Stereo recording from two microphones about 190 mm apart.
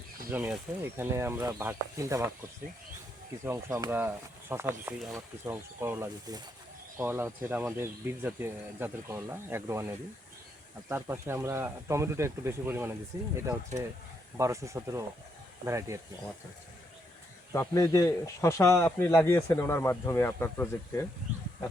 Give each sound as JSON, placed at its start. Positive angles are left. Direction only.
{"t": 0.3, "sound": "speech", "side_deg": -10}
{"t": 3.4, "sound": "speech", "side_deg": -15}
{"t": 17.5, "sound": "speech", "side_deg": 15}